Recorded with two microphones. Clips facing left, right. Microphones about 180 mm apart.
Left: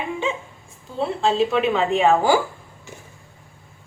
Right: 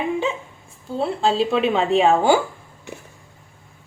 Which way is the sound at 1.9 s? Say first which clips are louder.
Right 2 dB; 30° right (ahead or behind).